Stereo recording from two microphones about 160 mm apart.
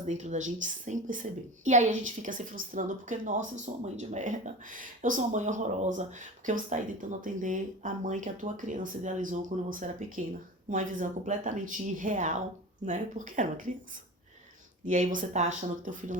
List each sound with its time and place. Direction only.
0.0 s a woman's voice: 50° right (ahead or behind)
14.8 s a woman's voice: 55° right (ahead or behind)